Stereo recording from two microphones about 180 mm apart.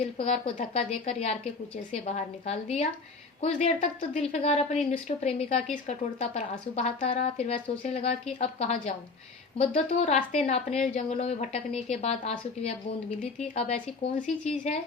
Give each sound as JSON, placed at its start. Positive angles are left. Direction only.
{"t": 0.0, "sound": "a woman's voice", "side_deg": 35}